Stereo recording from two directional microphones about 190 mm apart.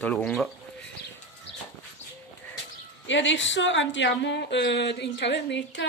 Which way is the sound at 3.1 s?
75° left (ahead or behind).